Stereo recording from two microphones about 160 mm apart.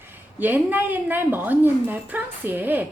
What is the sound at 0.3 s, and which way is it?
A woman's voice, 10° right (ahead or behind).